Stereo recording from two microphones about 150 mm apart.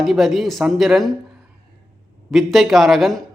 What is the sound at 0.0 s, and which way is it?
A man's voice, centre (ahead or behind).